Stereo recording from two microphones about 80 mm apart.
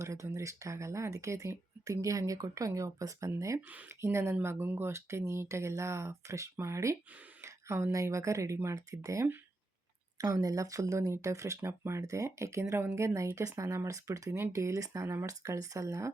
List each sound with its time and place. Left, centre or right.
0.0 s speech: right
3.7 s speech: right
4.0 s speech: right
10.2 s speech: right